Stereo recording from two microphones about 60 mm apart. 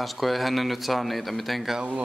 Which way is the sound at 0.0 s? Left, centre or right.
Centre.